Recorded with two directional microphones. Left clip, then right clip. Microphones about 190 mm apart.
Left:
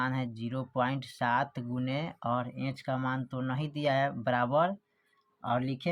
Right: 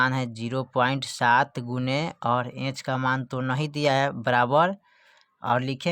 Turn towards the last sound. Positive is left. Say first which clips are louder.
# right 7 dB
turn(degrees=-55)  # may be behind; listen again after turning